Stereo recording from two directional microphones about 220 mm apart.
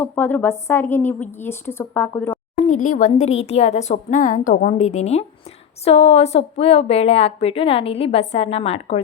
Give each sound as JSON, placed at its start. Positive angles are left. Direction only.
{"t": 0.0, "sound": "a woman's voice", "side_deg": 10}
{"t": 2.6, "sound": "a woman's voice", "side_deg": 35}